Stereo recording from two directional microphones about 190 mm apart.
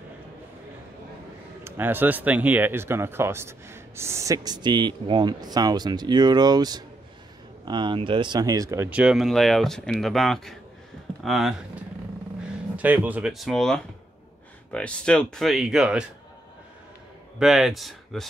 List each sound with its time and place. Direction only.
1.6 s speech: 10° right (ahead or behind)
17.4 s speech: centre (ahead or behind)